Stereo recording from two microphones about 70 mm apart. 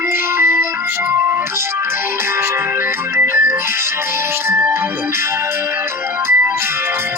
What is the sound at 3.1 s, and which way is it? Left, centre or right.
Music, right.